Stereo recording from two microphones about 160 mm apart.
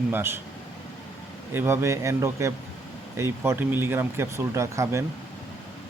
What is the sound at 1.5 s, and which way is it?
Speech, 15° right (ahead or behind).